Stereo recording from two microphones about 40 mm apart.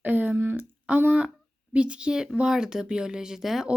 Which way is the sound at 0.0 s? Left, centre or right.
Right.